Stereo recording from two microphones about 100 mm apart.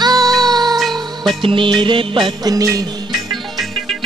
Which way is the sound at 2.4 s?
35° right (ahead or behind).